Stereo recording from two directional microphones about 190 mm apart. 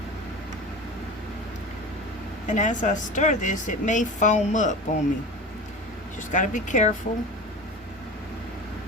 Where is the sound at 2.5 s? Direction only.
40° left (ahead or behind).